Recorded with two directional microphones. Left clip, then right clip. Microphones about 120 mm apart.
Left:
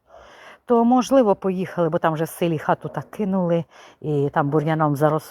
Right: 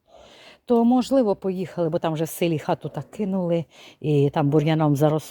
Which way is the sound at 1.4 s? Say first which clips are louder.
Left 3 dB; 25° right (ahead or behind).